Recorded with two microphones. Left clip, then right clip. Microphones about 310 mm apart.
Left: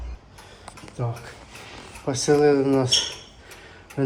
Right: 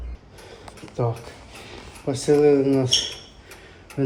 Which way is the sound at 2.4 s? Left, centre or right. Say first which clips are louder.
Right 2 dB; left.